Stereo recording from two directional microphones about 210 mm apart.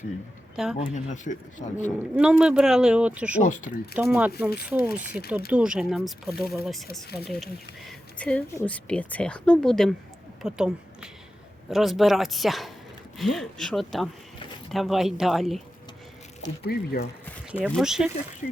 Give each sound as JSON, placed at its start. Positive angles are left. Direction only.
{"t": 0.5, "sound": "speech", "side_deg": -5}
{"t": 0.9, "sound": "speech", "side_deg": 35}
{"t": 2.1, "sound": "speech", "side_deg": -5}
{"t": 3.4, "sound": "speech", "side_deg": 35}
{"t": 3.9, "sound": "speech", "side_deg": -10}
{"t": 16.4, "sound": "speech", "side_deg": 50}
{"t": 17.7, "sound": "speech", "side_deg": 0}